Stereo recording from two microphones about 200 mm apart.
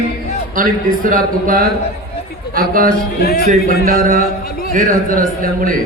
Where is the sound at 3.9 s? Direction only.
45° right (ahead or behind).